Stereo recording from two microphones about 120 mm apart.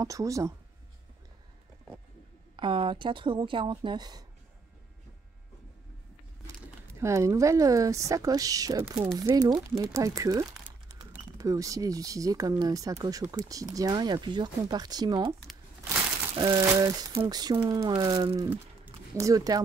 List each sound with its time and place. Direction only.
0.0 s speech: 25° right (ahead or behind)
2.5 s a woman's voice: 45° right (ahead or behind)
7.0 s speech: 25° right (ahead or behind)
16.3 s speech: 40° right (ahead or behind)
18.5 s a sound: 15° right (ahead or behind)
19.2 s speech: 30° right (ahead or behind)